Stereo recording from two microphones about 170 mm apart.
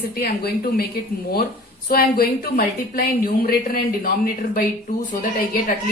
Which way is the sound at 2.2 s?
60° left (ahead or behind).